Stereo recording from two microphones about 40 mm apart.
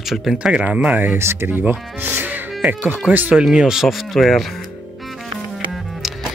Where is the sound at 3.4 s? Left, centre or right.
Centre.